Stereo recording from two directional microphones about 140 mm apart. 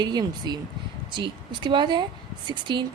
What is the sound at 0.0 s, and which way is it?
Speech, 30° right (ahead or behind).